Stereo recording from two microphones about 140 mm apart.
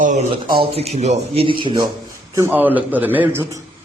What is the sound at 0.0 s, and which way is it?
Speech, 60° right (ahead or behind).